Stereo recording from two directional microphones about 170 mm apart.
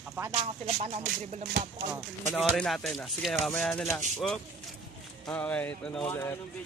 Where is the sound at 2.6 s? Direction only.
5° left (ahead or behind).